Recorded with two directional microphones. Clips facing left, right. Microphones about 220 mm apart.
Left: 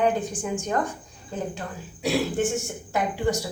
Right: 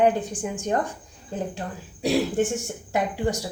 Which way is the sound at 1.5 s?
35° right (ahead or behind).